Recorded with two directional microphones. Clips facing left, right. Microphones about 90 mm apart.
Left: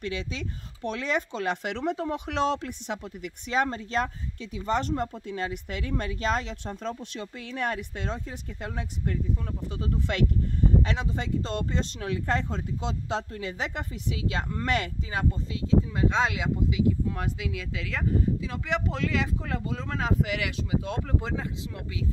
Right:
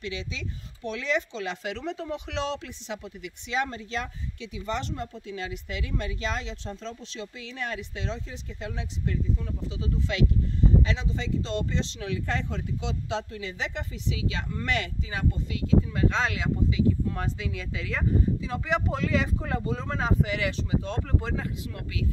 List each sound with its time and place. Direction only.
0.0 s speech: 45° left (ahead or behind)
15.6 s speech: 25° left (ahead or behind)